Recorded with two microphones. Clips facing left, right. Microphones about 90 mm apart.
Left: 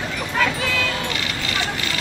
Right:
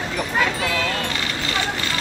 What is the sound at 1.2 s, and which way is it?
Vehicle, 35° right (ahead or behind).